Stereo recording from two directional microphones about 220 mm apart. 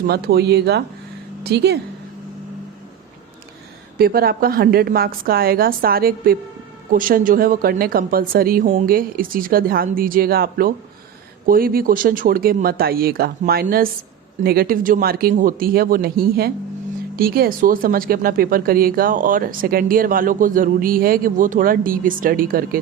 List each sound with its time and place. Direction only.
0.1 s a woman's voice: 45° right (ahead or behind)
3.9 s a woman's voice: 45° right (ahead or behind)